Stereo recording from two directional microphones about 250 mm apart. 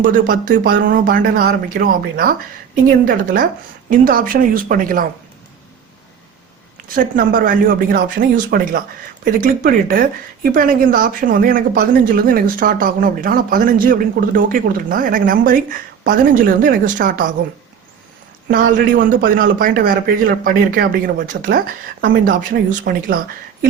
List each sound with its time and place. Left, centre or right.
0.0 s a woman's voice: right
6.8 s a woman's voice: right
18.9 s a woman's voice: right